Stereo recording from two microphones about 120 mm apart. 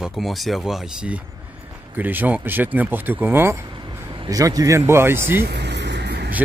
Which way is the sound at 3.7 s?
40° right (ahead or behind).